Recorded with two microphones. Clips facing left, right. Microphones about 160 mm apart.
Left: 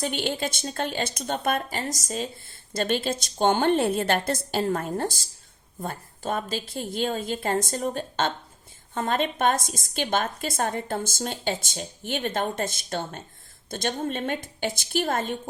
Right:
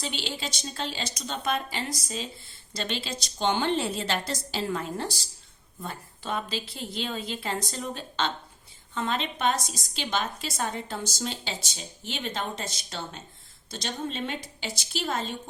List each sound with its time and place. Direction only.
0.0 s a woman's voice: 55° left (ahead or behind)